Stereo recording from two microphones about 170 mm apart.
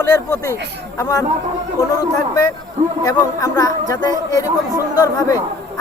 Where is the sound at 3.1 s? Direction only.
20° left (ahead or behind).